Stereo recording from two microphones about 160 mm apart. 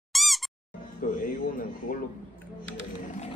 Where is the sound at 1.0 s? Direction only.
55° left (ahead or behind).